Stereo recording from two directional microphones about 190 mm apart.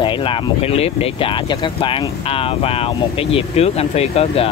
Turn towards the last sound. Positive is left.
turn(degrees=30)  # may be behind; listen again after turning